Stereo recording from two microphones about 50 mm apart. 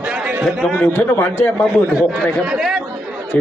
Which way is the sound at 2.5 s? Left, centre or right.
Centre.